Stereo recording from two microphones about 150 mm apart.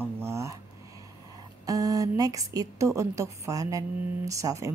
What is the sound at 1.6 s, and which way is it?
A woman's voice, 25° right (ahead or behind).